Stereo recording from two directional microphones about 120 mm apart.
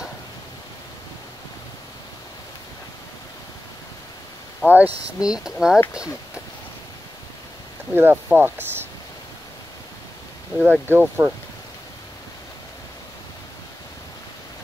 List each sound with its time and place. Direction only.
4.6 s speech: 15° right (ahead or behind)
7.9 s speech: 20° right (ahead or behind)
10.6 s speech: 15° right (ahead or behind)